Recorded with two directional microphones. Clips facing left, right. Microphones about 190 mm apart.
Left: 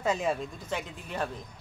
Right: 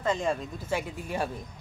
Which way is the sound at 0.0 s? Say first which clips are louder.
Even; 5° left (ahead or behind).